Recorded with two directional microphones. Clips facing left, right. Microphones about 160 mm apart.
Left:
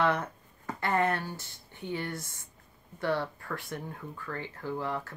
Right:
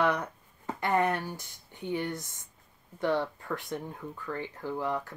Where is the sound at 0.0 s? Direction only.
15° right (ahead or behind).